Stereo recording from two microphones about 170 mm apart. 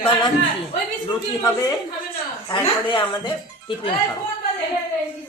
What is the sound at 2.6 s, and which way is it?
Speech, 30° left (ahead or behind).